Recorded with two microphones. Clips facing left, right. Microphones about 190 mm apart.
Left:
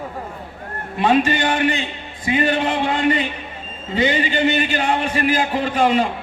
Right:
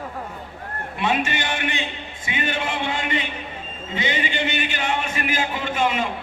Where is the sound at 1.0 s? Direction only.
35° left (ahead or behind).